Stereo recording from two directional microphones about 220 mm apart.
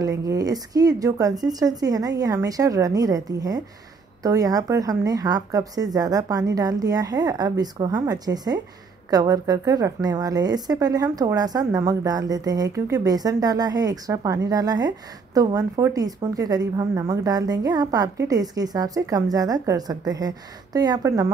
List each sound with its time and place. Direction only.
0.0 s speech: 15° right (ahead or behind)